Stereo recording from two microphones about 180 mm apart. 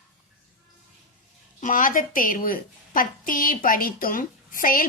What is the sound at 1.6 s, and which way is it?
A woman's voice, 50° left (ahead or behind).